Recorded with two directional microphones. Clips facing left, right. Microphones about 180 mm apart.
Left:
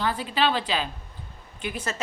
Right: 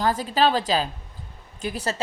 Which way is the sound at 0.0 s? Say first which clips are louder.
Right 4 dB; 40° right (ahead or behind).